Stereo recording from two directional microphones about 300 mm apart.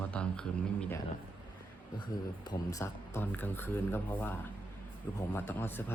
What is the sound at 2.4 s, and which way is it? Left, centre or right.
Speech, centre.